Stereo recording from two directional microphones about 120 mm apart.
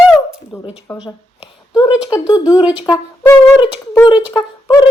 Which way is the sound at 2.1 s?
30° left (ahead or behind).